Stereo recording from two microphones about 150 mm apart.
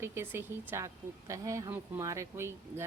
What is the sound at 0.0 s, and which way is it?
Speech, 15° right (ahead or behind).